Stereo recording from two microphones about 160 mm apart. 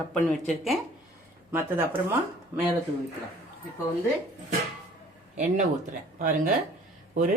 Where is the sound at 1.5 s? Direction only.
15° right (ahead or behind).